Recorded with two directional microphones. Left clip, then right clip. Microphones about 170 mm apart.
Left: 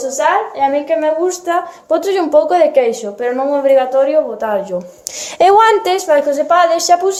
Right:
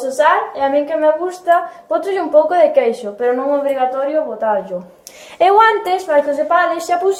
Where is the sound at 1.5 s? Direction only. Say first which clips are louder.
Right 1 dB; 55° left (ahead or behind).